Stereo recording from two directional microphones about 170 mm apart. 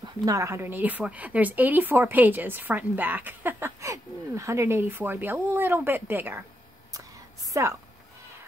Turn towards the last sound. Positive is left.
turn(degrees=-20)  # may be behind; listen again after turning